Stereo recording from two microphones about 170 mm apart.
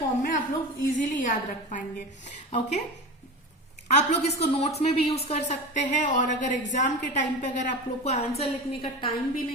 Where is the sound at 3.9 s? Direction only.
40° left (ahead or behind).